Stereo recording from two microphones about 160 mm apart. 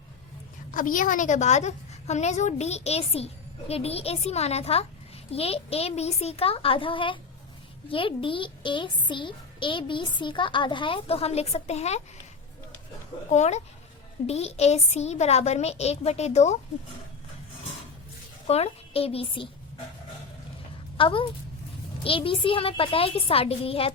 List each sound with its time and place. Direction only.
0.7 s a woman's voice: 55° left (ahead or behind)
13.3 s a woman's voice: 45° left (ahead or behind)
18.4 s a child's voice: 40° left (ahead or behind)
21.0 s a child's voice: 35° left (ahead or behind)